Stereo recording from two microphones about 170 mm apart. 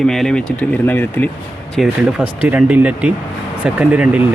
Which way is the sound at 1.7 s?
5° right (ahead or behind).